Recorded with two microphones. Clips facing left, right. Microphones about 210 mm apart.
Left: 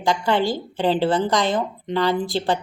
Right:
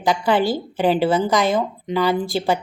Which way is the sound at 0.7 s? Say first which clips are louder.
Right 2 dB; 10° right (ahead or behind).